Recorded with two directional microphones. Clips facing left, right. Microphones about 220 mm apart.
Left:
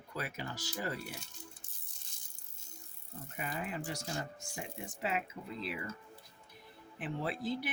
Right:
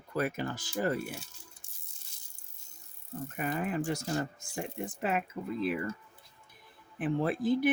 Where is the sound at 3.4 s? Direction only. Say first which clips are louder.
Right 7 dB; 50° right (ahead or behind).